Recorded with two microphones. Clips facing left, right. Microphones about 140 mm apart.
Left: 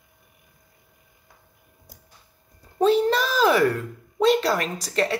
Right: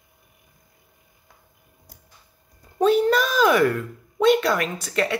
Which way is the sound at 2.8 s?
30° left (ahead or behind).